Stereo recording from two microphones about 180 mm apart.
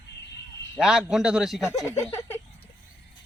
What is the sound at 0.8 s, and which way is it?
Speech, 5° right (ahead or behind).